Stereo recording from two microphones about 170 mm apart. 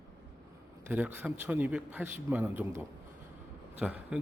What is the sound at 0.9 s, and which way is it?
A man's voice, 10° right (ahead or behind).